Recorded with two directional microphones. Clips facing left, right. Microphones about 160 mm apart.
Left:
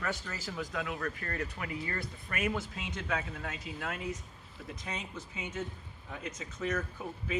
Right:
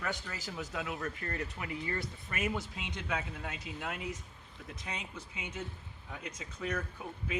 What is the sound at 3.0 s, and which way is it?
Speech, 10° right (ahead or behind).